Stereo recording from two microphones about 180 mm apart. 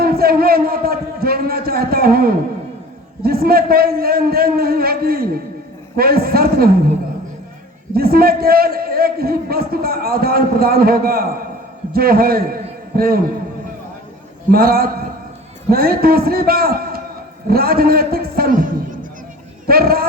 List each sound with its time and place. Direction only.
0.0 s a sound: 55° right (ahead or behind)
3.2 s a man's voice: 55° right (ahead or behind)
7.9 s a man's voice: 55° right (ahead or behind)
14.5 s a man's voice: 55° right (ahead or behind)